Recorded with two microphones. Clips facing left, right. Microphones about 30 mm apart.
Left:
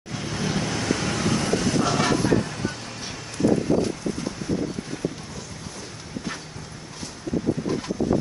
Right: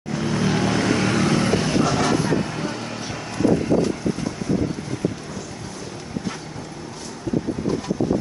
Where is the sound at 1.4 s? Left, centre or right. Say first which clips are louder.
Right 3 dB; right.